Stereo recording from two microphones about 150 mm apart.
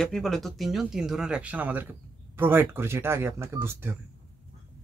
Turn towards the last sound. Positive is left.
turn(degrees=-15)  # may be behind; listen again after turning